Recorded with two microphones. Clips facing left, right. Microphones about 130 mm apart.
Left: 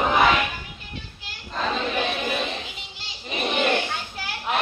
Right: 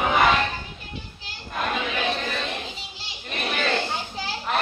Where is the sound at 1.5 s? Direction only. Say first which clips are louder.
Left 1 dB; 10° right (ahead or behind).